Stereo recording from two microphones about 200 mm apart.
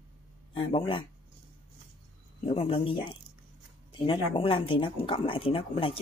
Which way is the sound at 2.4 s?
30° left (ahead or behind).